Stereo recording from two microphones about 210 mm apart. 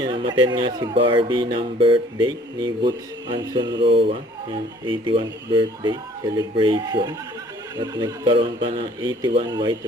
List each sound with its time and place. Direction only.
0.0 s speech: 20° right (ahead or behind)